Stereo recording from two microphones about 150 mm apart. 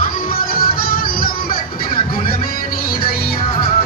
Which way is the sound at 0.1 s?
70° left (ahead or behind).